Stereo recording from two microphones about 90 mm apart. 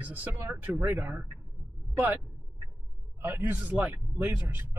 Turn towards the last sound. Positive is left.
turn(degrees=-20)  # may be behind; listen again after turning